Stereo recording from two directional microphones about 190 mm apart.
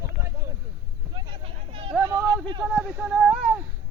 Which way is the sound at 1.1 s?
25° right (ahead or behind).